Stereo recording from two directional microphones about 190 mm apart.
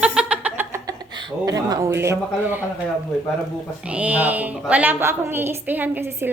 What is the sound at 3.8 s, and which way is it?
Speech, 5° right (ahead or behind).